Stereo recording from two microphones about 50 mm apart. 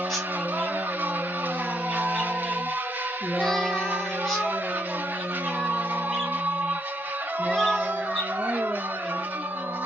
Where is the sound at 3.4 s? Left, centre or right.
Centre.